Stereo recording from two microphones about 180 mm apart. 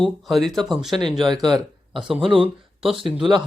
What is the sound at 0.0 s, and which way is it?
Speech, centre (ahead or behind).